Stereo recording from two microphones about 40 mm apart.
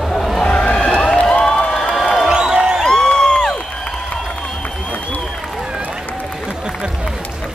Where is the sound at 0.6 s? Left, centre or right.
Left.